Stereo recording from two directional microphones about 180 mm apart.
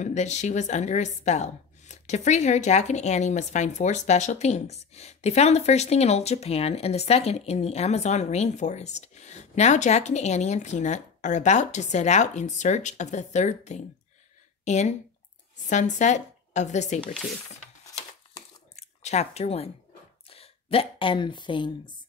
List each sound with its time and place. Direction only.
0.0 s a woman's voice: 40° left (ahead or behind)
17.1 s speech: centre (ahead or behind)
18.8 s speech: 35° left (ahead or behind)